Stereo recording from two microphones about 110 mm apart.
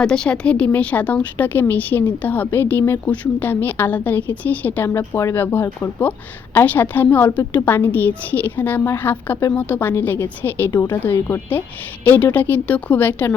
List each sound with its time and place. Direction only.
0.0 s a woman's voice: 5° left (ahead or behind)